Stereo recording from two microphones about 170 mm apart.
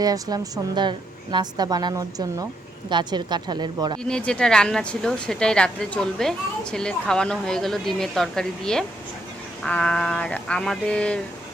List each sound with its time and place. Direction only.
0.0 s a woman's voice: 20° right (ahead or behind)
4.0 s speech: 5° left (ahead or behind)